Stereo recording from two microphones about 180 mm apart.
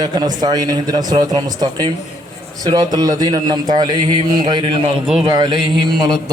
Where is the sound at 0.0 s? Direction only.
25° right (ahead or behind).